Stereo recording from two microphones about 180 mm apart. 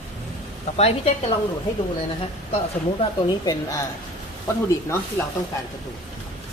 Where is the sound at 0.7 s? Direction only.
35° left (ahead or behind).